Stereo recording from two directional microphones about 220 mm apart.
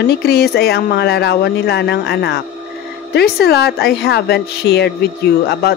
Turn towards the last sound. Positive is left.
turn(degrees=45)  # may be behind; listen again after turning